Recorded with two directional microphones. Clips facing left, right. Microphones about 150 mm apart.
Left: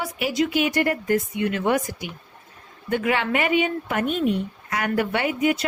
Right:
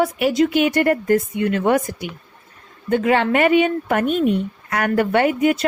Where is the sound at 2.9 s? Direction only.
35° right (ahead or behind).